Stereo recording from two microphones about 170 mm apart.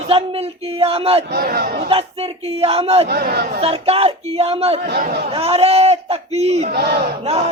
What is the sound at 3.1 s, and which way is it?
Speech, 65° right (ahead or behind).